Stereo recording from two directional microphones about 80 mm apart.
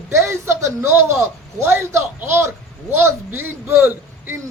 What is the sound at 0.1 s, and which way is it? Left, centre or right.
A man's voice, right.